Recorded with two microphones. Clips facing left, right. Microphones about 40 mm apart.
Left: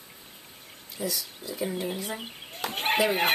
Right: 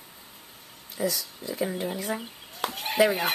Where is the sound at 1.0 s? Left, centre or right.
Right.